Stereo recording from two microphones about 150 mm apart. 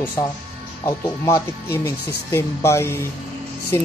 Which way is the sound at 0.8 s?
20° left (ahead or behind).